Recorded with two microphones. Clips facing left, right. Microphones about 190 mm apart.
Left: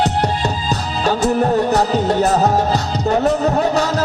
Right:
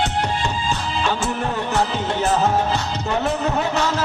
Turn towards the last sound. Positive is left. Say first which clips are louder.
# left 5 dB
turn(degrees=40)  # may be behind; listen again after turning